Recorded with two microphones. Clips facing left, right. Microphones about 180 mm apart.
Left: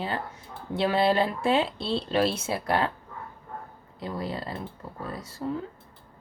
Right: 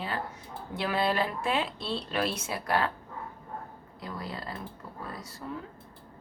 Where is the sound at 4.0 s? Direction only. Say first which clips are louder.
Left 6 dB; 25° left (ahead or behind).